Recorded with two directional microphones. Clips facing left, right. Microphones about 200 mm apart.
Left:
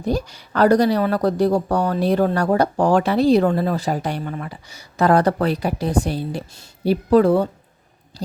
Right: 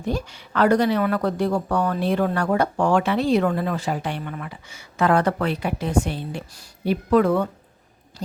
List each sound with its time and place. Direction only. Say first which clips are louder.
0.0 s speech: left 4 dB; 40° left (ahead or behind)